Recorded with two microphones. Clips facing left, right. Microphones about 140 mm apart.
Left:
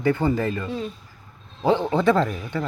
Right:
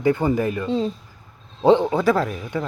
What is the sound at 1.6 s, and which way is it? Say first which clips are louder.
Speech: right 3 dB; 15° right (ahead or behind).